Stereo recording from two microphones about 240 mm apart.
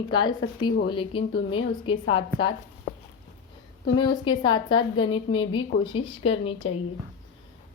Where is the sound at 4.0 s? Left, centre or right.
Centre.